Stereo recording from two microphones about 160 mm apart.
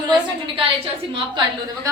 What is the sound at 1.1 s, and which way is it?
Speech, 30° right (ahead or behind).